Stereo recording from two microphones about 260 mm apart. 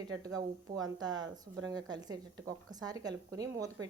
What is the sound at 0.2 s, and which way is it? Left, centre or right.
Speech, centre.